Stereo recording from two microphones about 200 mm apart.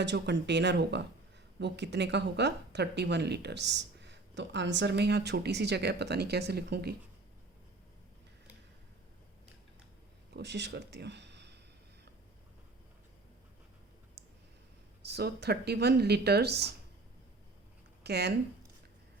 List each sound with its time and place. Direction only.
0.0 s speech: 60° right (ahead or behind)
10.3 s speech: 60° right (ahead or behind)
15.0 s speech: 55° right (ahead or behind)
18.0 s speech: 55° right (ahead or behind)